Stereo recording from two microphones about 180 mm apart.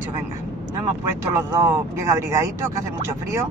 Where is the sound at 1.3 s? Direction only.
15° right (ahead or behind).